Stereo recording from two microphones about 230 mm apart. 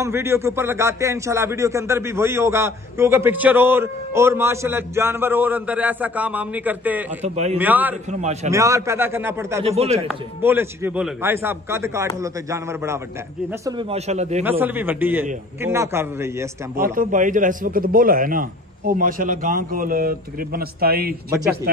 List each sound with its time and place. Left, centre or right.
0.0 s speech: centre
7.2 s a man's voice: right
7.5 s speech: centre
8.1 s a man's voice: right
8.5 s speech: centre
9.7 s a man's voice: right
10.0 s speech: centre
13.7 s a man's voice: right
14.4 s speech: centre
16.8 s a man's voice: right